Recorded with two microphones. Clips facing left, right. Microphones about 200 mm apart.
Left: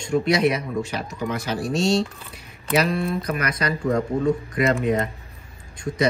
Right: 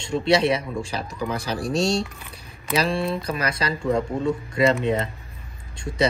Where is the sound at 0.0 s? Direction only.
30° right (ahead or behind).